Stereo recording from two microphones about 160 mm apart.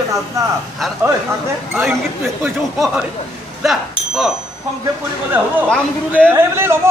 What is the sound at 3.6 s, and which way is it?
Speech, centre (ahead or behind).